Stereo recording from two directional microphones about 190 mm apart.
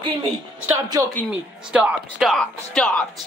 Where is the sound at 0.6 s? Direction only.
20° right (ahead or behind).